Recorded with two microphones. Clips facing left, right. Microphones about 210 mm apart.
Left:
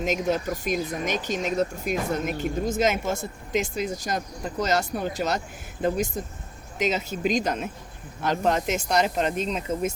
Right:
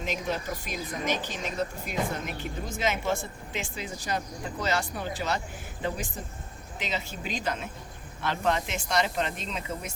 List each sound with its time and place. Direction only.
0.0 s speech: 45° left (ahead or behind)
6.7 s speech: 45° left (ahead or behind)